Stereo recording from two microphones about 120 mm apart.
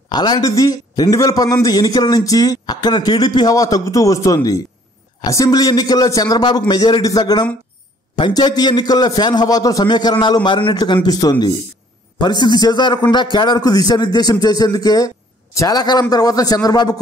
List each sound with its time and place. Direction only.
0.1 s a man's voice: 35° left (ahead or behind)